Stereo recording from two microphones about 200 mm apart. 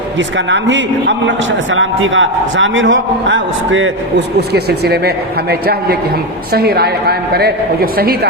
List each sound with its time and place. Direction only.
0.2 s a man's voice: 65° right (ahead or behind)
4.4 s a woman's voice: 55° right (ahead or behind)